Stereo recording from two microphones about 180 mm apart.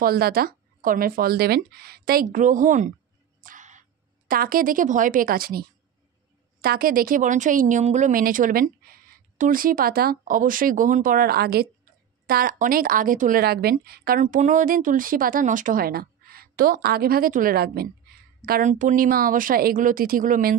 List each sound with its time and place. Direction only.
0.0 s speech: 55° right (ahead or behind)
3.3 s a sound: 50° right (ahead or behind)
4.3 s speech: 50° right (ahead or behind)